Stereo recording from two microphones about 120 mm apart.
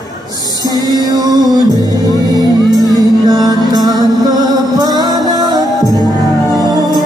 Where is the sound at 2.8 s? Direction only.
35° right (ahead or behind).